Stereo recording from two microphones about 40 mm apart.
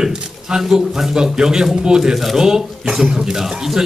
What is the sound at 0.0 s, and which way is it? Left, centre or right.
A man's voice, centre.